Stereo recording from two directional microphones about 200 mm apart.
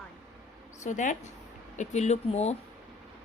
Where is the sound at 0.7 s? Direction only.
35° left (ahead or behind).